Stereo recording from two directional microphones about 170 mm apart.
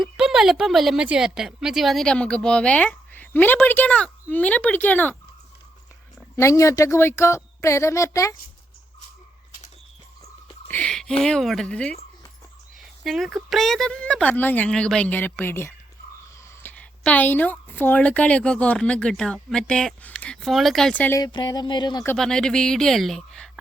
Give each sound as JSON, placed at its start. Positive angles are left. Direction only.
{"t": 0.0, "sound": "speech", "side_deg": -5}
{"t": 6.1, "sound": "a woman's voice", "side_deg": 15}
{"t": 10.7, "sound": "a sound", "side_deg": 5}
{"t": 11.2, "sound": "a woman's voice", "side_deg": 5}
{"t": 21.2, "sound": "a sound", "side_deg": 25}
{"t": 22.0, "sound": "speech", "side_deg": 5}